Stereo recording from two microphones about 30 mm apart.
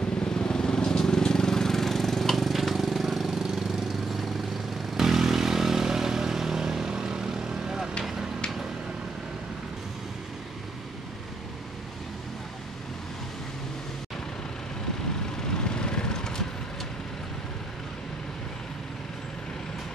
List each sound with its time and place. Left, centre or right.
0.2 s vehicle: left; by 2.7 s centre
2.7 s jackhammer: centre
3.3 s engine: centre
4.9 s vehicle: centre
15.5 s vehicle: left